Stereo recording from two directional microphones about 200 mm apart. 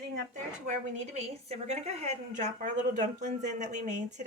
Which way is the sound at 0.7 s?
35° right (ahead or behind).